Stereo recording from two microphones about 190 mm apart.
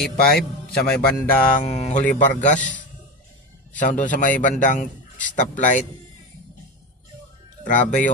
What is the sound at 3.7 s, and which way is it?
A man's voice, 40° left (ahead or behind).